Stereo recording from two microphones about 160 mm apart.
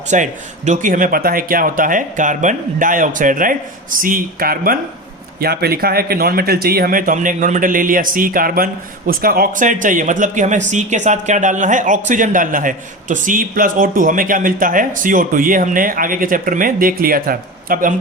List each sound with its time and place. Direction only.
0.1 s speech: 50° right (ahead or behind); by 4.8 s 65° right (ahead or behind)
5.4 s speech: 75° right (ahead or behind)